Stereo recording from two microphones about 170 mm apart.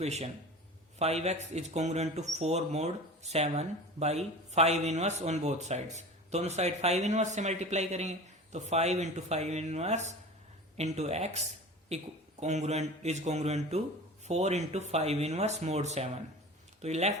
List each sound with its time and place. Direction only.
0.0 s speech: 40° right (ahead or behind)